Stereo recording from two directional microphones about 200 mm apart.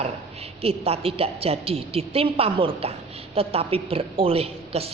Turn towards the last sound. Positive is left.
turn(degrees=-30)  # may be behind; listen again after turning